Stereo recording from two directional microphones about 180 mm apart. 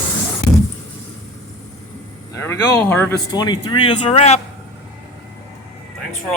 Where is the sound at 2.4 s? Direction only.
15° left (ahead or behind).